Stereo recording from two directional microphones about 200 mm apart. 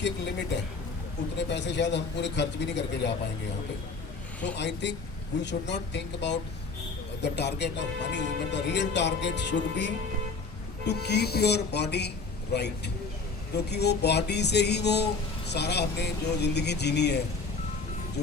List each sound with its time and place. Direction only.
1.4 s speech: 60° left (ahead or behind)
4.4 s speech: 60° left (ahead or behind)